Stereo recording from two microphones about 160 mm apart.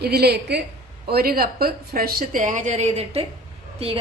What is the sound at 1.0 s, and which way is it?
A woman's voice, 70° right (ahead or behind).